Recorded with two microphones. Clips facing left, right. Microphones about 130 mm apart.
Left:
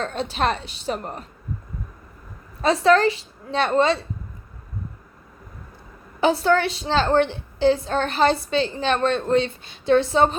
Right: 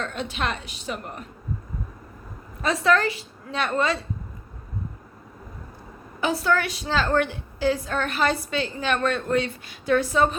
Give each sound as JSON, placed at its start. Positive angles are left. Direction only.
{"t": 0.0, "sound": "a woman's voice", "side_deg": 35}
{"t": 2.6, "sound": "a woman's voice", "side_deg": 25}
{"t": 6.1, "sound": "a woman's voice", "side_deg": 30}